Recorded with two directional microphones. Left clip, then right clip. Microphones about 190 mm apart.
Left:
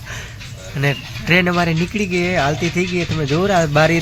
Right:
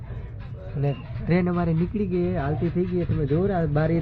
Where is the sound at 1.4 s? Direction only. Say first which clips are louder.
Left 9 dB; 20° left (ahead or behind).